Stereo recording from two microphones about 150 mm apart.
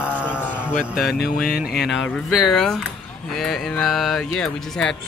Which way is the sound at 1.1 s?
80° left.